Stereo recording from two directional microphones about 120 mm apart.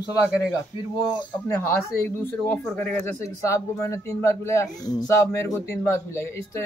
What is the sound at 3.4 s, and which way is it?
A man's voice, 25° left (ahead or behind).